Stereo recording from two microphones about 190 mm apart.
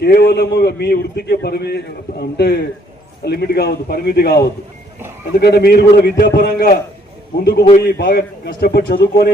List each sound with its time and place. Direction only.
0.0 s a man's voice: 55° left (ahead or behind)
7.9 s a man's voice: 55° left (ahead or behind)